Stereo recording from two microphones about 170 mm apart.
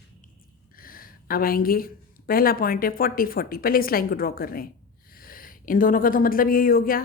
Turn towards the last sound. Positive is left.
turn(degrees=55)  # may be behind; listen again after turning